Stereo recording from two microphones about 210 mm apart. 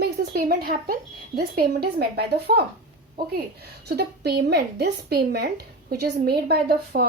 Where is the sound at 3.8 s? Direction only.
50° right (ahead or behind).